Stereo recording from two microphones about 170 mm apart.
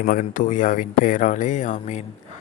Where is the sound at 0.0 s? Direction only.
55° left (ahead or behind).